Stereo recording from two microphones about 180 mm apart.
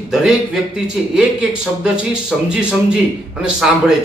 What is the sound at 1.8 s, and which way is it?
Speech, 5° right (ahead or behind).